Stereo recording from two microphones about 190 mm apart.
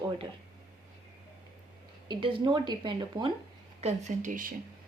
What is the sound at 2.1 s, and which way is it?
A woman's voice, 25° right (ahead or behind).